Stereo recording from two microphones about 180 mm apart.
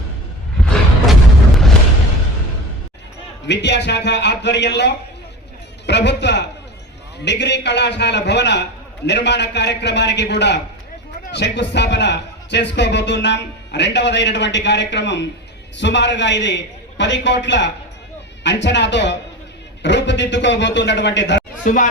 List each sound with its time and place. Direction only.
0.6 s a sound: 5° left (ahead or behind)
3.4 s a man's voice: 75° left (ahead or behind)
21.6 s speech: 45° left (ahead or behind)